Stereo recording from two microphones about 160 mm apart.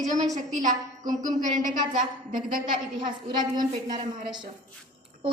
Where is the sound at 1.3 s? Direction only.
55° right (ahead or behind).